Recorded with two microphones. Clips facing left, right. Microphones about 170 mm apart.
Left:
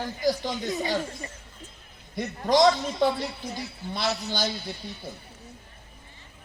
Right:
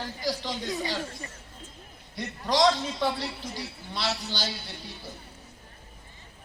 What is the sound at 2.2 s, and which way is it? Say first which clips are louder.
A man's voice: left 4 dB; 50° left (ahead or behind).